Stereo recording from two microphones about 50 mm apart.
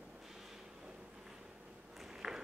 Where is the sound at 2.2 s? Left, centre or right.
Centre.